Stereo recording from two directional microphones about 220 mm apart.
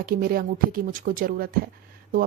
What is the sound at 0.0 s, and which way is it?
Speech, 40° right (ahead or behind).